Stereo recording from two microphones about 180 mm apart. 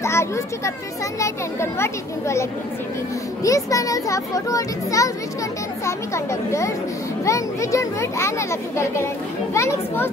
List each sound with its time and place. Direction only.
0.0 s a child's voice: 15° left (ahead or behind)
3.4 s a child's voice: 20° left (ahead or behind)